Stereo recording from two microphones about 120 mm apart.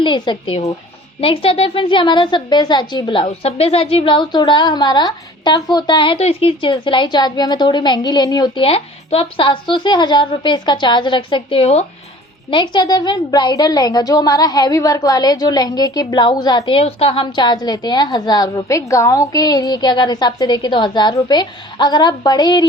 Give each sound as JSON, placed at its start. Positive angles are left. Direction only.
{"t": 0.0, "sound": "a woman's voice", "side_deg": 40}
{"t": 6.1, "sound": "a woman's voice", "side_deg": 55}
{"t": 8.6, "sound": "a woman's voice", "side_deg": 55}
{"t": 12.5, "sound": "a woman's voice", "side_deg": 40}